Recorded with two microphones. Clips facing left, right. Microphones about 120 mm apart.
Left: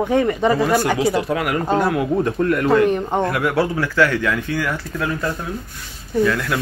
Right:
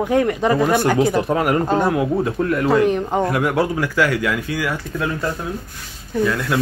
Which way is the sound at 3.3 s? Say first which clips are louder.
Right 1 dB; 15° right (ahead or behind).